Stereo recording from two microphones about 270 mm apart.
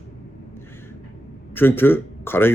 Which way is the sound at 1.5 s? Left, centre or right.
Centre.